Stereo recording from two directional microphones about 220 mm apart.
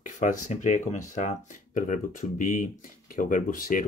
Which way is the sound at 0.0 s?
35° left (ahead or behind).